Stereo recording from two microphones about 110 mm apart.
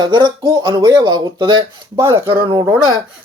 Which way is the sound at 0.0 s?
40° right (ahead or behind).